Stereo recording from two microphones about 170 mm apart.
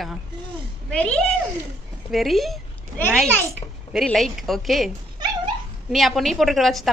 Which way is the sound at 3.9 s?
Centre (ahead or behind).